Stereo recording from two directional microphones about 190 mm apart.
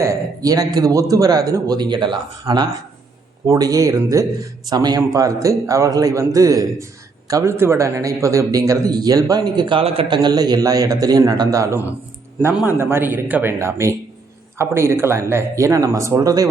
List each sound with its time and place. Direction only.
0.0 s a man's voice: 15° right (ahead or behind)